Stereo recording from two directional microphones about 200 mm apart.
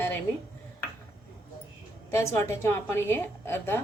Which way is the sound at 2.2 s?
15° left (ahead or behind).